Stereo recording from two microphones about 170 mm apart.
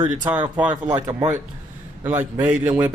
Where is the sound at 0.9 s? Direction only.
20° right (ahead or behind).